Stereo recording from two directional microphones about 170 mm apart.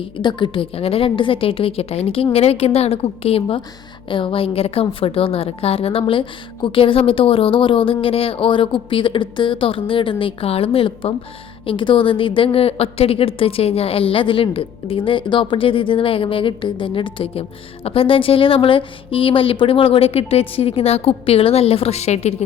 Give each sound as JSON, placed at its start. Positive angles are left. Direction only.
{"t": 0.0, "sound": "a woman's voice", "side_deg": 25}